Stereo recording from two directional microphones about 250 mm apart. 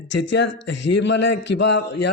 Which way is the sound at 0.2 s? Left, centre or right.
Left.